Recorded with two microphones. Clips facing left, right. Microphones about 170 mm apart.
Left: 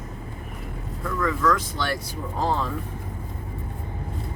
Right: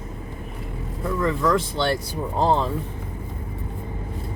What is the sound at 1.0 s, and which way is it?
Speech, 25° right (ahead or behind).